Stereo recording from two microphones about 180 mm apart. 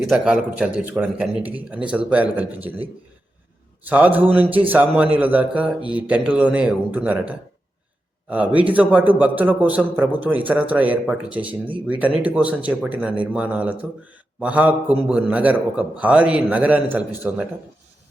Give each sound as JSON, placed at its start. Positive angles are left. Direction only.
{"t": 0.1, "sound": "a man's voice", "side_deg": -5}